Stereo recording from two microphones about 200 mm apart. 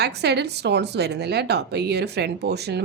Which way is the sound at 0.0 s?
55° right (ahead or behind).